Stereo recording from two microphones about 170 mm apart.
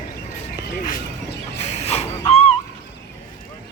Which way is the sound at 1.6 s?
40° left (ahead or behind).